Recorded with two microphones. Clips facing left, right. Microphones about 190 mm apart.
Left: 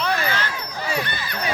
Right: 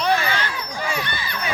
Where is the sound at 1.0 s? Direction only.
55° left (ahead or behind).